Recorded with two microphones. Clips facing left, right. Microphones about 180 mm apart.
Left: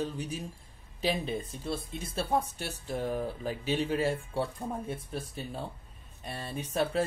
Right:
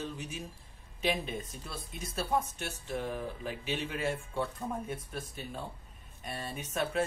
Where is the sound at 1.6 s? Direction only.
30° left (ahead or behind).